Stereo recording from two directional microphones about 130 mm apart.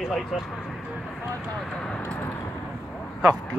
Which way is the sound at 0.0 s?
Centre (ahead or behind).